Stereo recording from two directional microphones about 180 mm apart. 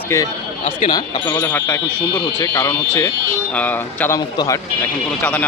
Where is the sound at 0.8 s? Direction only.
20° left (ahead or behind).